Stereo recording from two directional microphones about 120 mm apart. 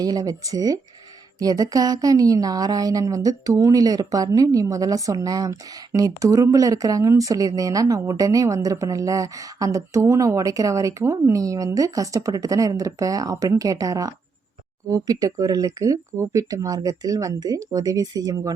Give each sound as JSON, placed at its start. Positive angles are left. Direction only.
{"t": 0.0, "sound": "speech", "side_deg": -30}